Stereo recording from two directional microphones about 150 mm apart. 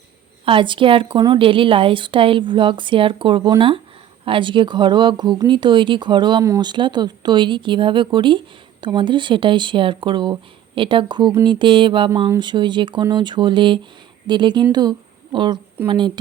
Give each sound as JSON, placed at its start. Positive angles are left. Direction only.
{"t": 0.4, "sound": "a woman's voice", "side_deg": -35}